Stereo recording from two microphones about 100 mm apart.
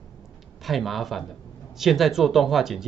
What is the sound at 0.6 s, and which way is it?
A man's voice, centre (ahead or behind).